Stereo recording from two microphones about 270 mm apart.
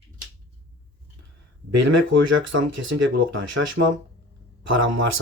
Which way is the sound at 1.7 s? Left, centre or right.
Right.